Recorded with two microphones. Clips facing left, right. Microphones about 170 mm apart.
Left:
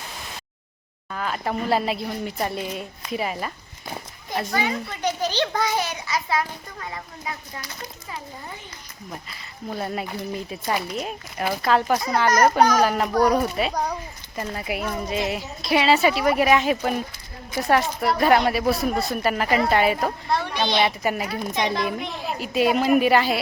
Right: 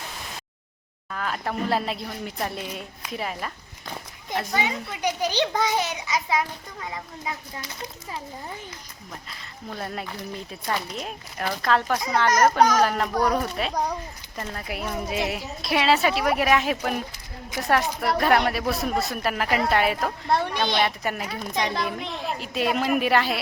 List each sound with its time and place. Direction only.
1.1 s a woman's voice: centre (ahead or behind)
4.7 s a child's voice: 10° right (ahead or behind)
7.5 s a child's voice: 25° right (ahead or behind)
9.6 s a woman's voice: 5° left (ahead or behind)
20.5 s a woman's voice: 50° right (ahead or behind)
20.8 s a woman's voice: 5° left (ahead or behind)